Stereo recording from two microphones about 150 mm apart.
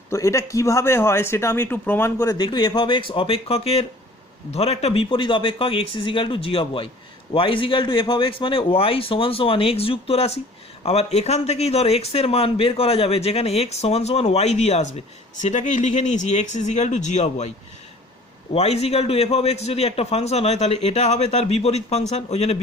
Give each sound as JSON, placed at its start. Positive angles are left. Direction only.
{"t": 0.1, "sound": "a man's voice", "side_deg": 20}
{"t": 18.5, "sound": "a man's voice", "side_deg": 45}